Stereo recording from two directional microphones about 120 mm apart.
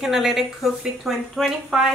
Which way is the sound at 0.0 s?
5° right (ahead or behind).